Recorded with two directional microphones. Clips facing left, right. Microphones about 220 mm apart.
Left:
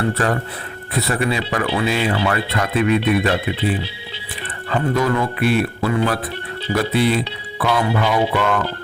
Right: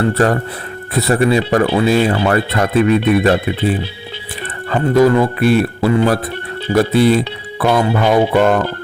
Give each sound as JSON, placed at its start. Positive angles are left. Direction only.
{"t": 0.9, "sound": "speech", "side_deg": -40}